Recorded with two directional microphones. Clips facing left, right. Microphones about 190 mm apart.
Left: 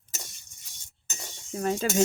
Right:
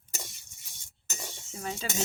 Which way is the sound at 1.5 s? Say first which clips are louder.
Left 10 dB; 55° left (ahead or behind).